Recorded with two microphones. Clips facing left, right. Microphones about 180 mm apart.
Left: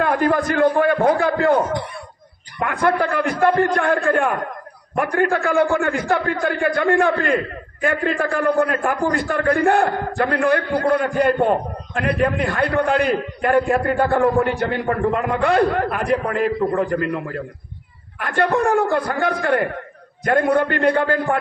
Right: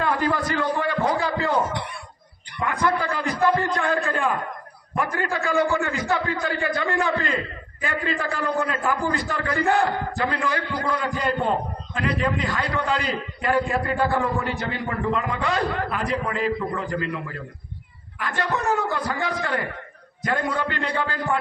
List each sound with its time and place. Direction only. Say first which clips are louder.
0.0 s a man's voice: left 5 dB; 50° left (ahead or behind)